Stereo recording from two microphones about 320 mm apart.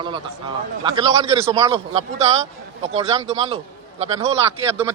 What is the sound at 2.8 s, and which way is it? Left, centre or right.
Speech, centre.